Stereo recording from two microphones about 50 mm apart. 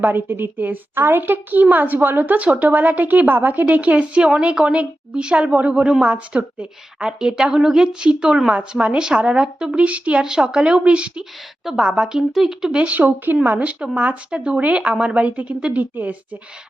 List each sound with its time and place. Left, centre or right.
0.0 s a woman's voice: right
10.2 s a woman's voice: centre
12.7 s a woman's voice: right
13.0 s a woman's voice: right